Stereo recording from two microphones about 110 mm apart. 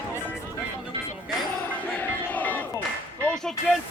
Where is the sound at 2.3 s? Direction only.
15° left (ahead or behind).